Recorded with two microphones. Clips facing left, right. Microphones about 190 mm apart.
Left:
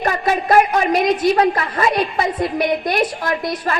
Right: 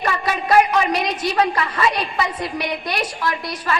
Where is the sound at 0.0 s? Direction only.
50° left (ahead or behind).